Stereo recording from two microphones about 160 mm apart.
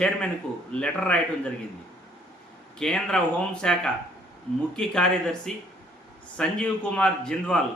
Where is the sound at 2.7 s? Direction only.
5° left (ahead or behind).